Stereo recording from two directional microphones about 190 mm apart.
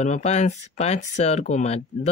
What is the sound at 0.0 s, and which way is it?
Speech, 35° left (ahead or behind).